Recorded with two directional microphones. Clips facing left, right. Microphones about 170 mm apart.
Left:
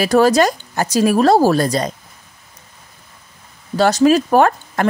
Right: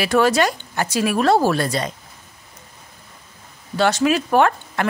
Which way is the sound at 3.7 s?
40° left (ahead or behind).